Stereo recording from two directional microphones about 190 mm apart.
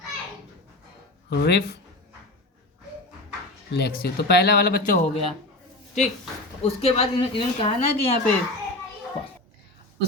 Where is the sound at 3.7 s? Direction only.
55° left (ahead or behind).